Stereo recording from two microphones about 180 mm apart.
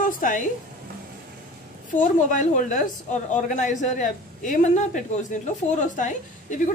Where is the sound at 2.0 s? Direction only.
45° left (ahead or behind).